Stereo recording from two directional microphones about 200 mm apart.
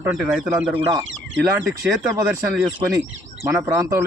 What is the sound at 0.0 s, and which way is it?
Speech, centre (ahead or behind).